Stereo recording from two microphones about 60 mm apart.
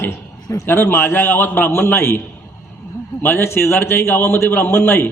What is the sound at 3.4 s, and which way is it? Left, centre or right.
A man's voice, left.